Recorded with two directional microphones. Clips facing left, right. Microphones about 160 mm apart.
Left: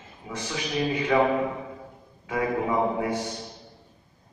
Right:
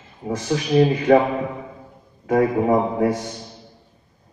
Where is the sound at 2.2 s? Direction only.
40° right (ahead or behind).